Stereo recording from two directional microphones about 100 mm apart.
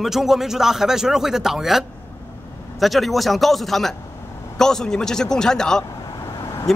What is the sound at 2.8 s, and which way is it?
A man's voice, centre (ahead or behind).